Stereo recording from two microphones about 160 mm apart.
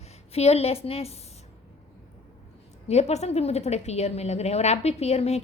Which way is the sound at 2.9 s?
45° left (ahead or behind).